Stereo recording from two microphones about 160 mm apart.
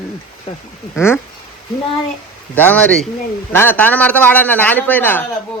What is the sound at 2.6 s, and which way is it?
A man's voice, 10° left (ahead or behind).